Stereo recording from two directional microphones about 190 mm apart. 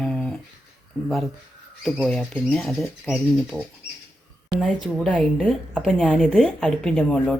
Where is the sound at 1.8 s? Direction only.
Centre (ahead or behind).